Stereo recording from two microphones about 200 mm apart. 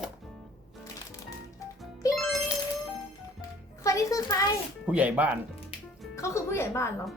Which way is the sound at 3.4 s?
15° left (ahead or behind).